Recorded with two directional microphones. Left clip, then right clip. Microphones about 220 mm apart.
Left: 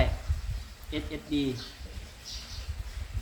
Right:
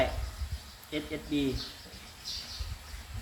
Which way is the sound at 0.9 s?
Centre (ahead or behind).